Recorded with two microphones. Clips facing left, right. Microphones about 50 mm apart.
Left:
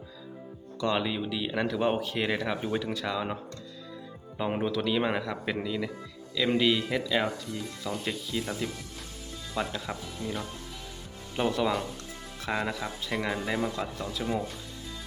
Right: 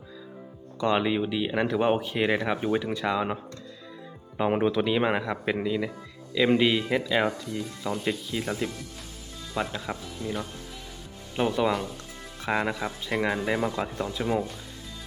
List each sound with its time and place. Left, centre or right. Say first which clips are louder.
0.8 s speech: right 4 dB; right
4.4 s speech: right 5 dB; right